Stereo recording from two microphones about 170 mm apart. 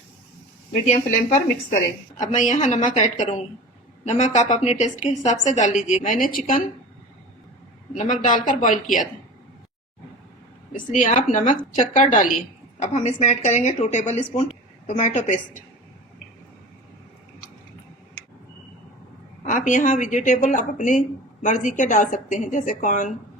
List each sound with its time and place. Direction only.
0.7 s a woman's voice: 45° left (ahead or behind)
7.9 s a woman's voice: 50° left (ahead or behind)
10.7 s a woman's voice: 50° left (ahead or behind)
19.5 s a woman's voice: 50° left (ahead or behind)